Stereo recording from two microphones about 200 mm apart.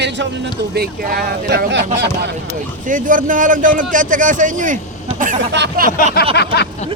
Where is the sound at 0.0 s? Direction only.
60° right (ahead or behind).